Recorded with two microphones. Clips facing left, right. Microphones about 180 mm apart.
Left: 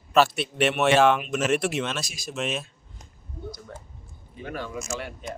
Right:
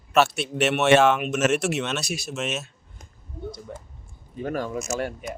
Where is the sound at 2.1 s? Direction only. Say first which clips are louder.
Right 7 dB; 65° right (ahead or behind).